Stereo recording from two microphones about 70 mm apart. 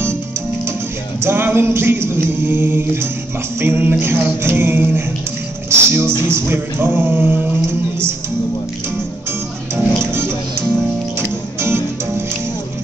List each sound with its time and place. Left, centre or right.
1.2 s a capella: right
6.1 s speech: left
6.4 s a capella: right
11.1 s music: right